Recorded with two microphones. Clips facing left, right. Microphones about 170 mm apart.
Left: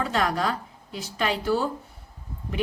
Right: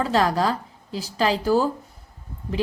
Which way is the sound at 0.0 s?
35° right (ahead or behind).